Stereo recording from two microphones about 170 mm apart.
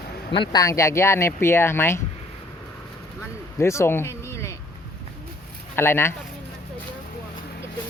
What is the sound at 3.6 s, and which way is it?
Speech, 15° left (ahead or behind).